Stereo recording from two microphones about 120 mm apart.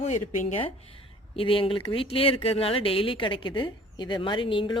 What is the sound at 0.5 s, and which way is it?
Speech, 50° left (ahead or behind).